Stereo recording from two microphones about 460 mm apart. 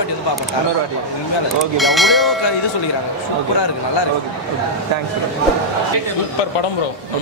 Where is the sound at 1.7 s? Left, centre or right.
Centre.